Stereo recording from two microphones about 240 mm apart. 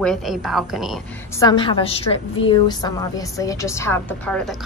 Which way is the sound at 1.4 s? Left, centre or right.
Centre.